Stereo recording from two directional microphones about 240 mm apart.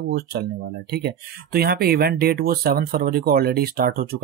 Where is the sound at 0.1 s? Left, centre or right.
Right.